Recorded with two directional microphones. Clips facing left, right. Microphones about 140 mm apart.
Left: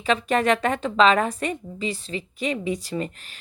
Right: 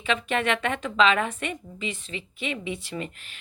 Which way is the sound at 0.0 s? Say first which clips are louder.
Left 5 dB; 40° left (ahead or behind).